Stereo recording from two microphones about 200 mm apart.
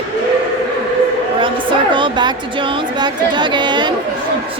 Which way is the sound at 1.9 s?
25° right (ahead or behind).